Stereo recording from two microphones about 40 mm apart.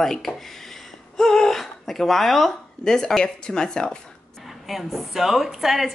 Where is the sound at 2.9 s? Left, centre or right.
Centre.